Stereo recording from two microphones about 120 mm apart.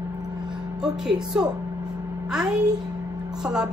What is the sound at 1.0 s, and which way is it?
A woman's voice, 5° right (ahead or behind).